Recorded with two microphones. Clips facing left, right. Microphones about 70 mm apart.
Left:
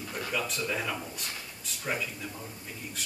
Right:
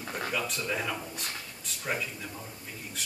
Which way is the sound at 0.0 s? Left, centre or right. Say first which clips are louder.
Right 2 dB; right.